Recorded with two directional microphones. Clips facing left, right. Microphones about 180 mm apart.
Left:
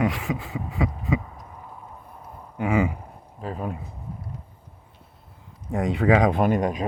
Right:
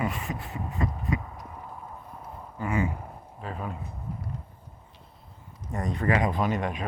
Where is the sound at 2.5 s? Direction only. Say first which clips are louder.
Left 6 dB; 80° left.